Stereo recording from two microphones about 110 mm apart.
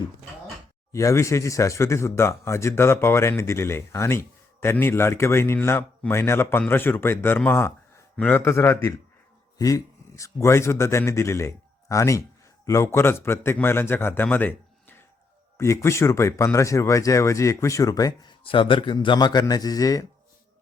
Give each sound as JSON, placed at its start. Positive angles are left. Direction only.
{"t": 0.9, "sound": "speech", "side_deg": 30}
{"t": 18.4, "sound": "speech", "side_deg": 50}